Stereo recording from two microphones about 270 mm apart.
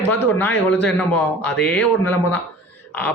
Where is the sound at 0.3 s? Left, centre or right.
Centre.